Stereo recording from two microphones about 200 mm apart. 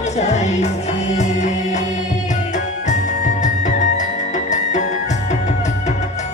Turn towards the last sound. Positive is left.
turn(degrees=35)  # may be behind; listen again after turning